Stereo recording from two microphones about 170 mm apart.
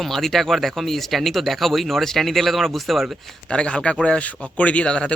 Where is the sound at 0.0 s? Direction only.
Centre (ahead or behind).